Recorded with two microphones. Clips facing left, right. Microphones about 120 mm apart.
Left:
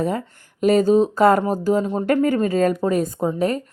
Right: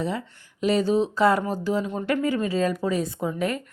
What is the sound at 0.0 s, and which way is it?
A woman's voice, 50° left (ahead or behind).